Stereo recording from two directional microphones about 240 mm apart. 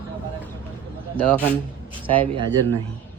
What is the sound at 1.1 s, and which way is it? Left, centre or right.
Speech, centre.